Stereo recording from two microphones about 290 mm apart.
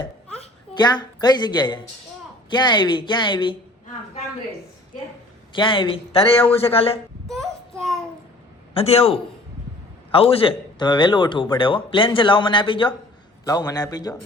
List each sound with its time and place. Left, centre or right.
0.7 s a man's voice: centre
5.5 s a man's voice: centre
7.3 s child singing: centre
8.7 s a man's voice: centre